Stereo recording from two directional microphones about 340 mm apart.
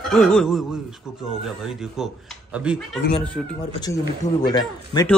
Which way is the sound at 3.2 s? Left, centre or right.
Centre.